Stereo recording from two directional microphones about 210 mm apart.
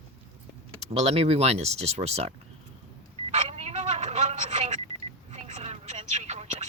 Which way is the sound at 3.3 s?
30° right (ahead or behind).